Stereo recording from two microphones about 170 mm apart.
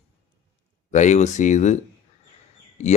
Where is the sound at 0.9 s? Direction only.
45° left (ahead or behind).